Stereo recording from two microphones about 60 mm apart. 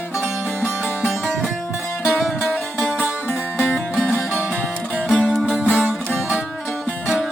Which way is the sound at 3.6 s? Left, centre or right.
Left.